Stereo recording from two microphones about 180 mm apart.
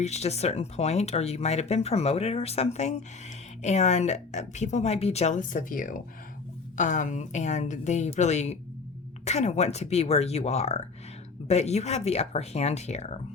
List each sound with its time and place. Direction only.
0.0 s speech: 35° left (ahead or behind)